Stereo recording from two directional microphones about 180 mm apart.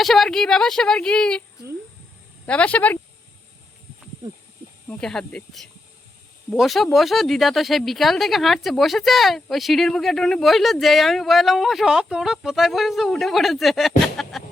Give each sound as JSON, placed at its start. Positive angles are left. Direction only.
{"t": 0.0, "sound": "speech", "side_deg": 0}
{"t": 2.5, "sound": "speech", "side_deg": 5}
{"t": 4.2, "sound": "a sound", "side_deg": -20}
{"t": 4.9, "sound": "speech", "side_deg": 5}